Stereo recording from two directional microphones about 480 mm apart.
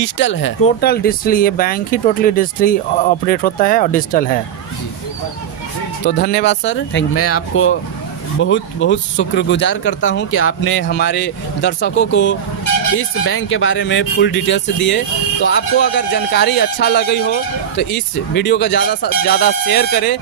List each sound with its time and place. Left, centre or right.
0.0 s speech: left
6.1 s speech: centre